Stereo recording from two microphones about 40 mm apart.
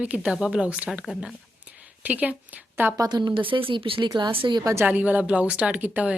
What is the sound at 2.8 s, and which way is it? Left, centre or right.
Speech, right.